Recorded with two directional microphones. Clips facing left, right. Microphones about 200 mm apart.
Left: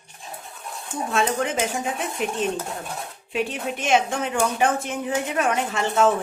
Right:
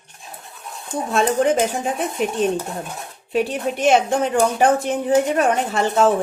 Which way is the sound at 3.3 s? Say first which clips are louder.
Right 6 dB; 40° right (ahead or behind).